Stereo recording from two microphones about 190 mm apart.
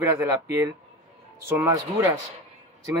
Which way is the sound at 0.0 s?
15° right (ahead or behind).